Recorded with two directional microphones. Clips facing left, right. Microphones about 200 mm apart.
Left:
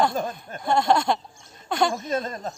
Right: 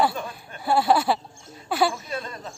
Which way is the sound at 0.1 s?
45° left (ahead or behind).